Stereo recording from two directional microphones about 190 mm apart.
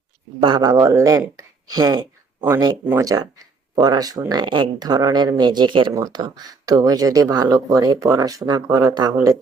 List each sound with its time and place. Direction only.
0.3 s speech: 25° right (ahead or behind)